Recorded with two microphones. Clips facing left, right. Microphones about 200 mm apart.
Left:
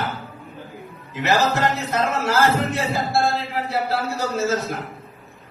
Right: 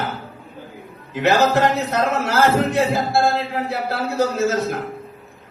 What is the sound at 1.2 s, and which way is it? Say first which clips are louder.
A man's voice: right 4 dB; 60° right (ahead or behind).